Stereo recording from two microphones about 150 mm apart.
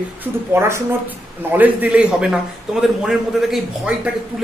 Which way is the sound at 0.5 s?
15° right (ahead or behind).